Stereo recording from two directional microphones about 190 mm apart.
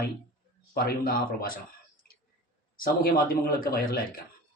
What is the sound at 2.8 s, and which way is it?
A man's voice, 50° left (ahead or behind).